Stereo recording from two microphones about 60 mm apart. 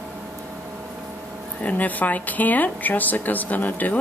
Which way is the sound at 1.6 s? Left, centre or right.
Left.